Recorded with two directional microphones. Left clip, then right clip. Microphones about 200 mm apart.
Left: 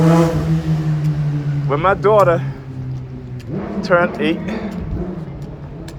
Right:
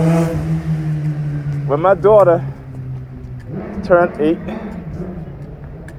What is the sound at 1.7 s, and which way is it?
Speech, 45° right (ahead or behind).